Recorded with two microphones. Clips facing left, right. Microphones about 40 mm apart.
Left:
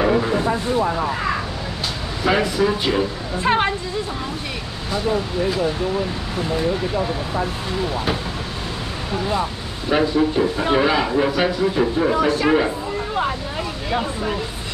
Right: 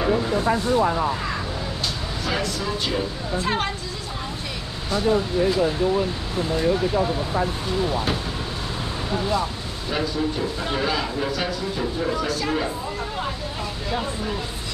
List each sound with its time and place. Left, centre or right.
0.0 s a sound: left
2.2 s speech: left
7.9 s speech: centre
9.3 s speech: left